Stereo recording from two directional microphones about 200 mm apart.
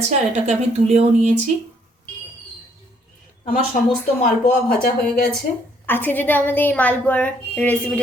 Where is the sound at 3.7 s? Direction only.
40° left (ahead or behind).